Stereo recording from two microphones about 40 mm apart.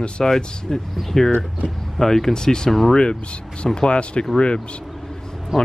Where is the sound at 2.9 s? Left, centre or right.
Left.